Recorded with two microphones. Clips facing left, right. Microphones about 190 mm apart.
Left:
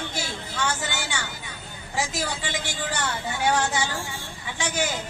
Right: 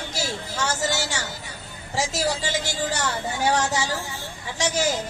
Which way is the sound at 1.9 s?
40° right (ahead or behind).